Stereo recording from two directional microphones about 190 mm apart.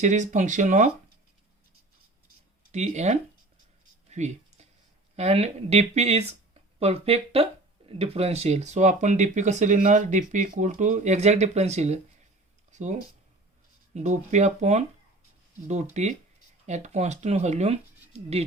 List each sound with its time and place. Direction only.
0.0 s speech: 40° right (ahead or behind)
2.7 s speech: 35° right (ahead or behind)
4.1 s a sound: 35° right (ahead or behind)
5.1 s speech: 35° right (ahead or behind)